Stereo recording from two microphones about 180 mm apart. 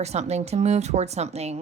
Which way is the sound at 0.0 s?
35° right (ahead or behind).